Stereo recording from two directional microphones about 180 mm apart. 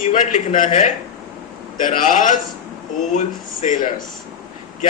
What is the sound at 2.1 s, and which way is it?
A man's voice, 45° left (ahead or behind).